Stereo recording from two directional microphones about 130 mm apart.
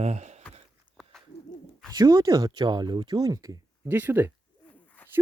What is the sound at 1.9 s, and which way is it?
Speech, 30° right (ahead or behind).